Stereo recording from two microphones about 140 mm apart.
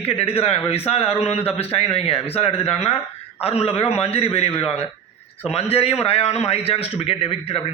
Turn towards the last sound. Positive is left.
turn(degrees=45)  # may be behind; listen again after turning